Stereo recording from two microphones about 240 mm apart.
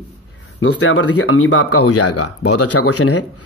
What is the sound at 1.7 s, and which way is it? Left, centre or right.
A man's voice, left.